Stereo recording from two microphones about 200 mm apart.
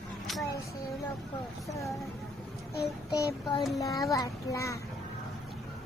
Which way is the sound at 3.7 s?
15° left (ahead or behind).